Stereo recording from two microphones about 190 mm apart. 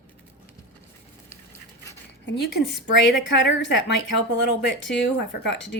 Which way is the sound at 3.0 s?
65° left (ahead or behind).